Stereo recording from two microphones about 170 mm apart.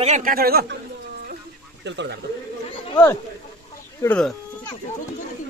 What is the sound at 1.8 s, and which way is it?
Speech, 90° right.